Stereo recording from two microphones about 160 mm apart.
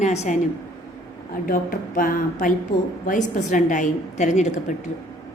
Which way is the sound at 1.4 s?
60° left (ahead or behind).